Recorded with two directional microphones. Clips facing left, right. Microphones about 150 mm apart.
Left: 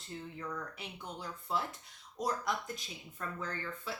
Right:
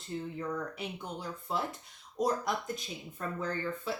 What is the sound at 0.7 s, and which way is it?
Speech, 20° right (ahead or behind).